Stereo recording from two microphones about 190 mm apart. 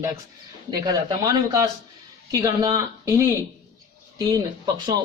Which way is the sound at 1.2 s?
20° right (ahead or behind).